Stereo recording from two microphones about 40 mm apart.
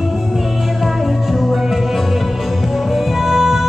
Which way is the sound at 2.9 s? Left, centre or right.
Centre.